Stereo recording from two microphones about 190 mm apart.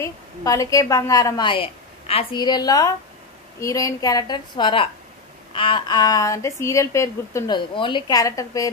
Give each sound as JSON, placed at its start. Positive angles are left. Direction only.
{"t": 0.0, "sound": "a woman's voice", "side_deg": 15}